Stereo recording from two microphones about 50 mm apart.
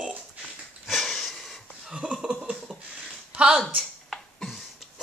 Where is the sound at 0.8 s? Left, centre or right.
Centre.